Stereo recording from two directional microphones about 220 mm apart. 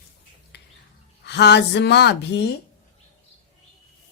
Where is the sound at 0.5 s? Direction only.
50° left (ahead or behind).